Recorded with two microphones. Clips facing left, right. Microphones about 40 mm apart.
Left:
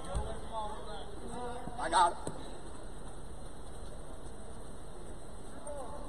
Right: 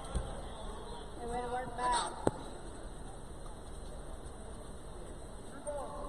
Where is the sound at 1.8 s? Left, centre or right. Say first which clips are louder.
Left 7 dB; left.